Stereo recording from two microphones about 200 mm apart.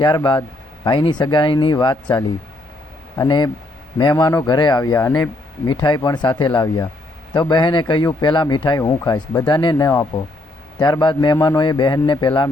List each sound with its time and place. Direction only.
0.0 s speech: 20° left (ahead or behind)